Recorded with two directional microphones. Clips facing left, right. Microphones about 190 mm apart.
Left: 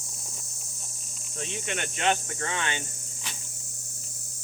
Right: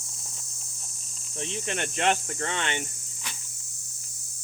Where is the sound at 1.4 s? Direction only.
35° right (ahead or behind).